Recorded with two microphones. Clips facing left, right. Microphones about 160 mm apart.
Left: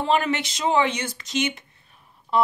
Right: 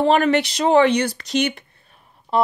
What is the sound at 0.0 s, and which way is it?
Speech, 65° right (ahead or behind).